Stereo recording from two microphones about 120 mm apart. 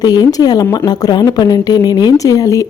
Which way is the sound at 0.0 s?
35° left (ahead or behind).